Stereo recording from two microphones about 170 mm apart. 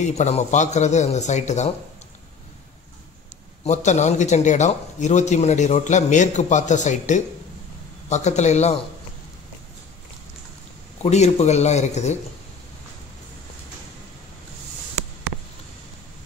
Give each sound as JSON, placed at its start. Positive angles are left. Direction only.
{"t": 0.0, "sound": "a man's voice", "side_deg": 45}
{"t": 3.6, "sound": "a man's voice", "side_deg": 45}
{"t": 11.0, "sound": "a man's voice", "side_deg": 40}